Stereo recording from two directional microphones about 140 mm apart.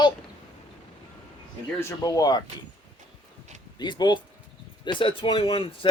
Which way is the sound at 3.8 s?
30° left (ahead or behind).